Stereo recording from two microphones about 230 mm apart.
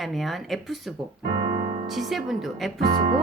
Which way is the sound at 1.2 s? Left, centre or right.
Right.